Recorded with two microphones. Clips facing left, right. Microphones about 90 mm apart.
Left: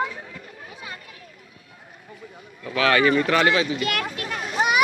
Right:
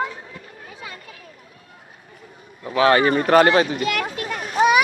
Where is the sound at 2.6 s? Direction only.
30° right (ahead or behind).